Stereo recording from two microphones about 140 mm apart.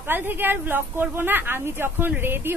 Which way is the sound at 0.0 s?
15° right (ahead or behind).